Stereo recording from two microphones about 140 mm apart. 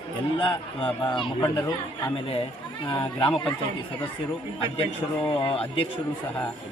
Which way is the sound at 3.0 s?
40° left (ahead or behind).